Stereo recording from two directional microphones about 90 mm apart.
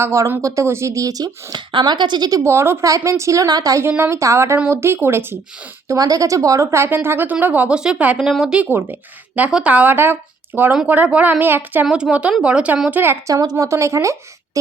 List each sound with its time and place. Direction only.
0.0 s speech: 30° right (ahead or behind)
1.5 s speech: 55° right (ahead or behind)
2.4 s speech: 30° right (ahead or behind)
3.8 s a woman's voice: 25° right (ahead or behind)
5.9 s a woman's voice: 40° right (ahead or behind); by 8.6 s 5° right (ahead or behind)
8.7 s a woman's voice: 20° right (ahead or behind)
11.9 s speech: 10° right (ahead or behind)
13.2 s speech: 45° right (ahead or behind)